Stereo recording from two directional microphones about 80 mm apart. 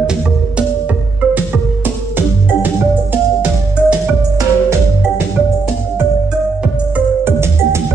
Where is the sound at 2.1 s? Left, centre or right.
Right.